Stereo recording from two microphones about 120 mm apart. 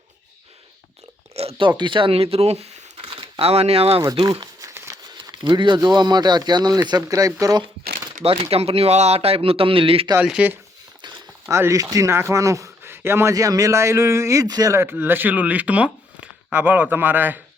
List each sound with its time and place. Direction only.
1.3 s speech: 55° right (ahead or behind)
3.1 s speech: 50° right (ahead or behind)
4.0 s crumpling: 30° right (ahead or behind)
5.1 s speech: 35° right (ahead or behind)
8.2 s speech: 55° right (ahead or behind)
10.2 s speech: 10° right (ahead or behind)
11.1 s speech: 20° right (ahead or behind)